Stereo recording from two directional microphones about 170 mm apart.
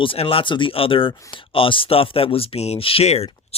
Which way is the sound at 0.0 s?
35° left (ahead or behind).